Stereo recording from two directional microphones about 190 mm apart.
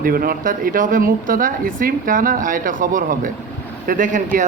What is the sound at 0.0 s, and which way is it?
Speech, 50° right (ahead or behind).